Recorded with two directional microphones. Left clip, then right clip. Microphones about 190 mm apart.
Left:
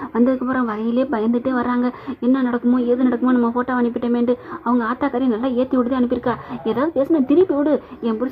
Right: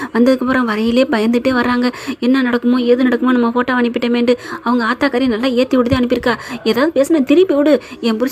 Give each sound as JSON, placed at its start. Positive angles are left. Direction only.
{"t": 0.2, "sound": "a woman's voice", "side_deg": -20}